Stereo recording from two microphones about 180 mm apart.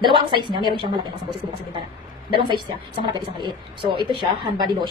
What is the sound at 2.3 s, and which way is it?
A woman's voice, 30° right (ahead or behind).